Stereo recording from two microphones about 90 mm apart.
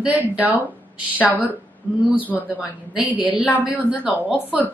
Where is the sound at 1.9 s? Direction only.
20° right (ahead or behind).